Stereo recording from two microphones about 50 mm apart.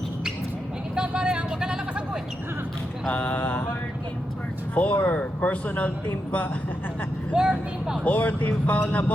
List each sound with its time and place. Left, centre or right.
0.9 s a sound: centre
3.1 s speech: left
4.7 s speech: left
7.3 s speech: centre
8.0 s speech: left
8.9 s a sound: left